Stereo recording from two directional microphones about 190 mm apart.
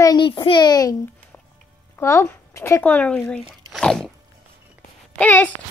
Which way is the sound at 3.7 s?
5° left (ahead or behind).